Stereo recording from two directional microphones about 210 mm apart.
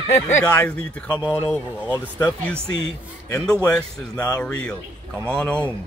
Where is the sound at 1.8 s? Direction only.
5° right (ahead or behind).